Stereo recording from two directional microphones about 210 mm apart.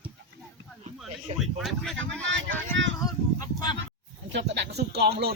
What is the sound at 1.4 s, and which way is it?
Speech, centre (ahead or behind).